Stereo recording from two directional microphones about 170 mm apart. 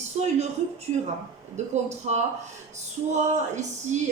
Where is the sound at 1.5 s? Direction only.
40° right (ahead or behind).